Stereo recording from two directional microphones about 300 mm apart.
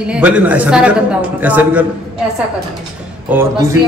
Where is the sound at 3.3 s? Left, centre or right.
Centre.